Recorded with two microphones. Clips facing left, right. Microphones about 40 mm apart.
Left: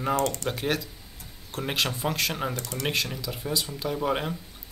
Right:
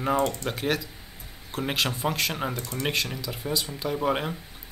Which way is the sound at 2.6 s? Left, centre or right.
Centre.